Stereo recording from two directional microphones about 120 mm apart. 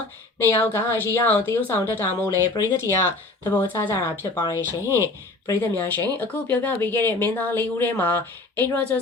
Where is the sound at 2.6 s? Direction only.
35° left (ahead or behind).